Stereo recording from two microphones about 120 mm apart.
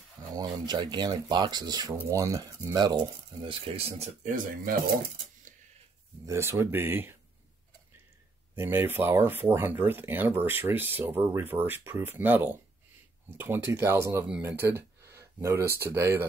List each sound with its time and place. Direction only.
0.3 s speech: 35° right (ahead or behind)
3.4 s speech: 50° right (ahead or behind)
6.2 s speech: 20° right (ahead or behind)
8.5 s speech: 20° right (ahead or behind)